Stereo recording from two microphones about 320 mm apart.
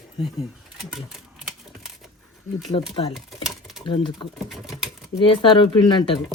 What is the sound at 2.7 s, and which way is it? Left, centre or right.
Speech, centre.